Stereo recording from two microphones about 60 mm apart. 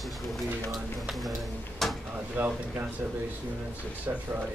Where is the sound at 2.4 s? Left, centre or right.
Right.